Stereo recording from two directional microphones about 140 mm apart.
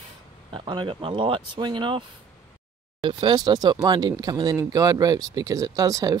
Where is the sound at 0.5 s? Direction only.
35° right (ahead or behind).